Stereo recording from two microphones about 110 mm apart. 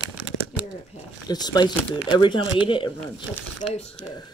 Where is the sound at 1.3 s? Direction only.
40° left (ahead or behind).